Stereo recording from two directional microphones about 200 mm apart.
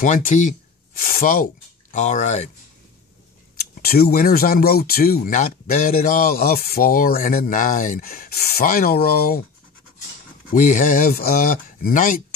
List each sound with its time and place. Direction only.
0.0 s speech: 40° left (ahead or behind)
3.8 s speech: 50° left (ahead or behind)
10.5 s speech: 40° left (ahead or behind)